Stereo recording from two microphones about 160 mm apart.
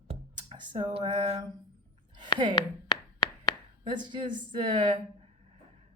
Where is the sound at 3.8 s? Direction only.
30° right (ahead or behind).